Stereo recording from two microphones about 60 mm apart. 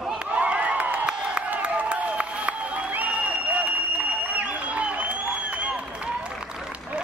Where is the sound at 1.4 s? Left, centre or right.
Right.